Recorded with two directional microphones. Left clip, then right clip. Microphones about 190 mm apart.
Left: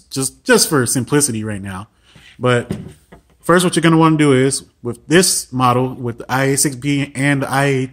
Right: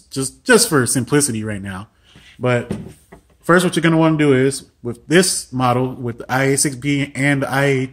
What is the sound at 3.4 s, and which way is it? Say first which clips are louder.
Speech: left 1 dB; 20° left (ahead or behind).